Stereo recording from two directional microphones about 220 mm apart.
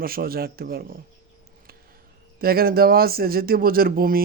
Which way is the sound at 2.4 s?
45° right (ahead or behind).